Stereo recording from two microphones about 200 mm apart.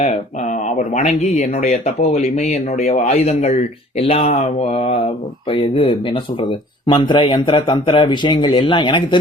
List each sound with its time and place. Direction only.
0.9 s speech: 35° left (ahead or behind)